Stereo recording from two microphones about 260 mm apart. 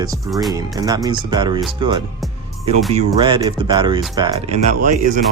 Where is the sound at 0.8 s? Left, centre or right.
Centre.